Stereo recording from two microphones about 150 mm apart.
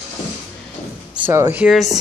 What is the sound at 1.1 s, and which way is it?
Speech, 15° right (ahead or behind).